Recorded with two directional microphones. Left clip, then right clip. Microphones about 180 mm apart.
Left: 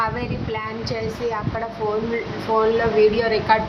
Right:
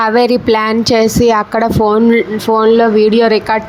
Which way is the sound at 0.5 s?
60° right (ahead or behind).